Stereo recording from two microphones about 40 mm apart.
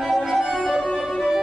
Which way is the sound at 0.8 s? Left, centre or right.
Centre.